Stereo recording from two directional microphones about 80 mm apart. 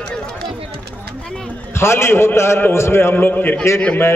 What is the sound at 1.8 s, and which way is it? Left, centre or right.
A man's voice, left.